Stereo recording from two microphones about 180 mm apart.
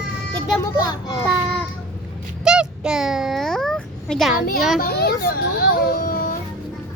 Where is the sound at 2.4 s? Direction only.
5° right (ahead or behind).